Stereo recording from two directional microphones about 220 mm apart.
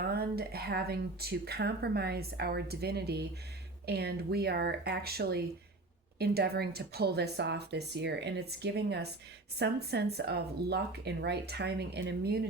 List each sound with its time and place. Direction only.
0.1 s speech: 45° right (ahead or behind)